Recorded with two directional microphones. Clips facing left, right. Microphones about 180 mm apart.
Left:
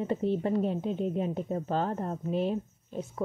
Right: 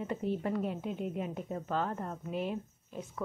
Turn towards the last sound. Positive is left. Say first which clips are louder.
# left 6 dB
turn(degrees=30)  # may be behind; listen again after turning